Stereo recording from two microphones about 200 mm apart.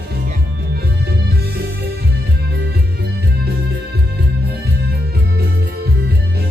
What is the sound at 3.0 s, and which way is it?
Music, 55° right (ahead or behind).